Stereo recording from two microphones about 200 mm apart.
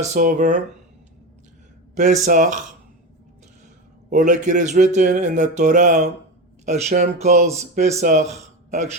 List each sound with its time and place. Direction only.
0.0 s speech: 40° right (ahead or behind)
2.0 s speech: 35° right (ahead or behind)
4.1 s speech: 40° right (ahead or behind)